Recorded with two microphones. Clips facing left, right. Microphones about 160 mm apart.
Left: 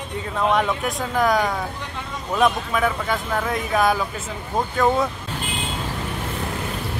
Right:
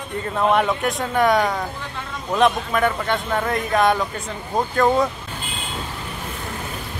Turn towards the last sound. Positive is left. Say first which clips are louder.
# right 2 dB
turn(degrees=0)  # may be behind; listen again after turning